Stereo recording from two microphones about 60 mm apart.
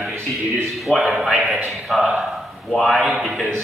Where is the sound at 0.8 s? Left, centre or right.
Centre.